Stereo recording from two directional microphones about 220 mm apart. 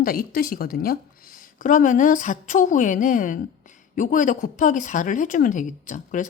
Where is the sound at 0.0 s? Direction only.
40° left (ahead or behind).